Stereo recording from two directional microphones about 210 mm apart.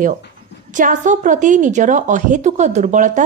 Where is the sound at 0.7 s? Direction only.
35° right (ahead or behind).